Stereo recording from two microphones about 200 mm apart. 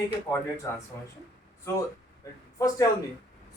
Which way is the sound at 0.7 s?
15° left (ahead or behind).